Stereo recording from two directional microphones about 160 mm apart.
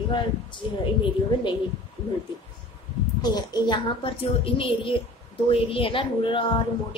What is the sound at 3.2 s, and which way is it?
A woman's voice, 25° left (ahead or behind).